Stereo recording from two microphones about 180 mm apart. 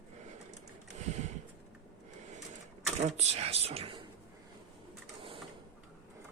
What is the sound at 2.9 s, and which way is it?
Speech, 35° right (ahead or behind).